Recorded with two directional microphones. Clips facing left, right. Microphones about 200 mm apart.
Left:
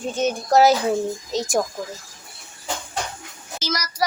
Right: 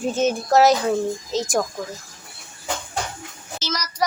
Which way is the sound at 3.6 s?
10° left (ahead or behind).